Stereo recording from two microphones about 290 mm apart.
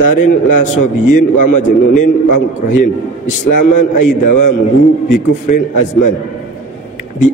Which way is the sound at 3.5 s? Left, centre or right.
Left.